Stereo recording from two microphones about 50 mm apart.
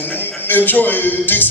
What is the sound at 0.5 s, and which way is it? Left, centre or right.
Speech, left.